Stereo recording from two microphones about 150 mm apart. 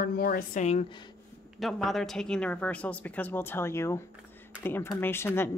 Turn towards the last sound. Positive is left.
turn(degrees=15)  # may be behind; listen again after turning